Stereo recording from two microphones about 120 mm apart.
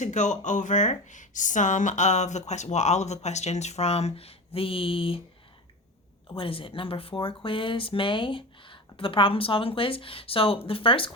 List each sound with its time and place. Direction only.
0.0 s speech: 90° left; by 5.2 s 50° left (ahead or behind)
6.3 s speech: 50° left (ahead or behind)